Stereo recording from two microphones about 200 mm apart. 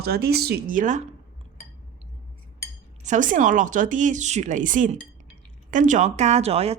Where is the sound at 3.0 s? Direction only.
40° right (ahead or behind).